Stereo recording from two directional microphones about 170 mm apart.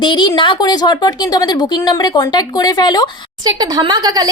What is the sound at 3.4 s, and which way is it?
Speech, 25° right (ahead or behind).